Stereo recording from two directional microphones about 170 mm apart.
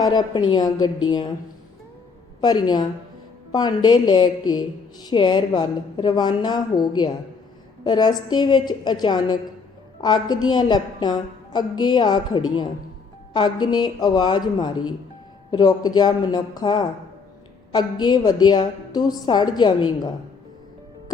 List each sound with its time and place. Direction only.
0.0 s a woman's voice: 25° left (ahead or behind)
2.4 s a woman's voice: 25° left (ahead or behind)